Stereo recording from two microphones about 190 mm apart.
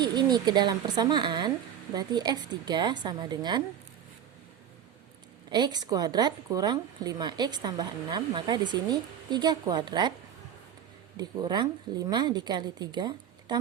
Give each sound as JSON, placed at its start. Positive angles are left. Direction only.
{"t": 0.0, "sound": "a woman's voice", "side_deg": -20}
{"t": 5.5, "sound": "a woman's voice", "side_deg": -25}
{"t": 11.2, "sound": "a woman's voice", "side_deg": -25}